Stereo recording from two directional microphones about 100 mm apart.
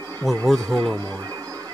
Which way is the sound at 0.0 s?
35° right (ahead or behind).